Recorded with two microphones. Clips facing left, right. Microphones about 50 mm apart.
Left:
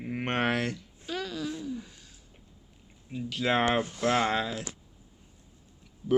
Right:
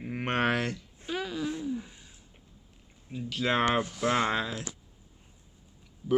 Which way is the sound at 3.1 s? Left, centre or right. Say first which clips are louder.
Left 1 dB; centre.